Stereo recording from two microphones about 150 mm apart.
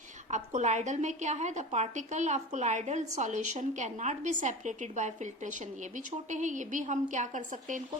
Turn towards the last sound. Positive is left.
turn(degrees=-60)  # may be behind; listen again after turning